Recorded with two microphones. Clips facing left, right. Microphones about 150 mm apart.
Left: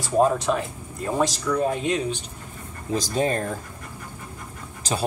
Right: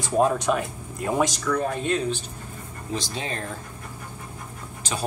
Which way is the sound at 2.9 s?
45° left (ahead or behind).